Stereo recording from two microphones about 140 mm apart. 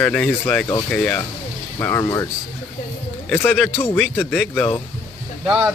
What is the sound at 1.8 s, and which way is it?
Speech, 20° left (ahead or behind).